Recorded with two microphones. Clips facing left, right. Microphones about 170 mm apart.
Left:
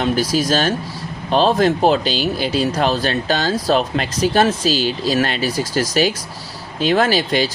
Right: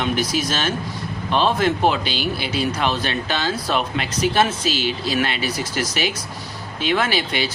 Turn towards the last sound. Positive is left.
turn(degrees=40)  # may be behind; listen again after turning